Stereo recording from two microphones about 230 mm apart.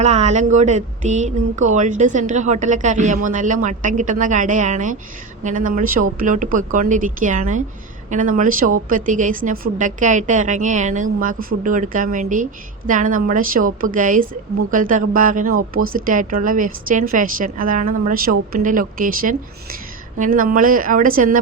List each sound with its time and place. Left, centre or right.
0.0 s speech: right